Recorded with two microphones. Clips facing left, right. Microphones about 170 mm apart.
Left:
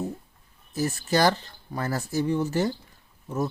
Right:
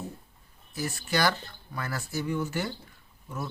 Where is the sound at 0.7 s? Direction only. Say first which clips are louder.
Left 6 dB; 40° left (ahead or behind).